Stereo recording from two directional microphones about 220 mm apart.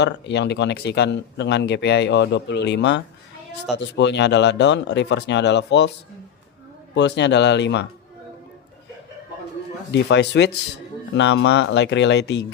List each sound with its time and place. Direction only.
0.0 s speech: 50° left (ahead or behind)
6.9 s speech: 55° left (ahead or behind)
9.9 s speech: 50° left (ahead or behind)